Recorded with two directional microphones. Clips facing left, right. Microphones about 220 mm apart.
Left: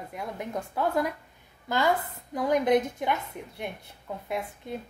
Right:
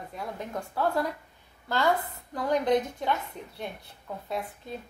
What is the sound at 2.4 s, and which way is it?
Speech, 15° left (ahead or behind).